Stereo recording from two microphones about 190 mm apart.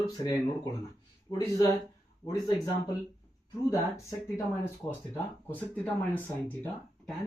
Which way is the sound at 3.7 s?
15° left (ahead or behind).